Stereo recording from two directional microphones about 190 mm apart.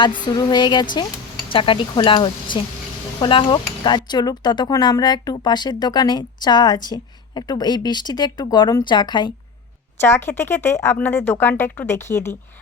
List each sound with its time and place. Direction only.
0.3 s speech: 20° left (ahead or behind)
10.0 s speech: 10° left (ahead or behind)